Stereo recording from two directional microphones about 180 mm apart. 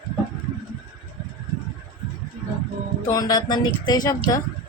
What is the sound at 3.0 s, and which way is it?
A woman's voice, 20° left (ahead or behind).